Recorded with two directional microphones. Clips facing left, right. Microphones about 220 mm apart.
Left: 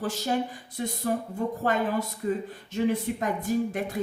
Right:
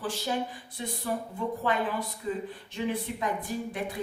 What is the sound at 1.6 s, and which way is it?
Speech, 45° left (ahead or behind).